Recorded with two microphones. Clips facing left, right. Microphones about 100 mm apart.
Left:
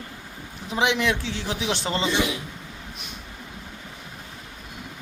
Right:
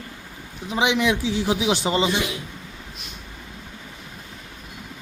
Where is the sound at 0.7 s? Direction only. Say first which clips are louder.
Right 2 dB; centre (ahead or behind).